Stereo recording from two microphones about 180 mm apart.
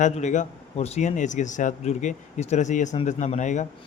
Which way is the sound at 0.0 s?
45° left (ahead or behind).